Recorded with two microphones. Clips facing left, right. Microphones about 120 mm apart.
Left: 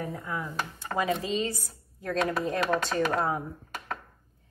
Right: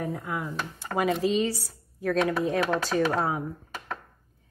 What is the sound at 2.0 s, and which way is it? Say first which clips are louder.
A woman's voice: right 3 dB; centre (ahead or behind).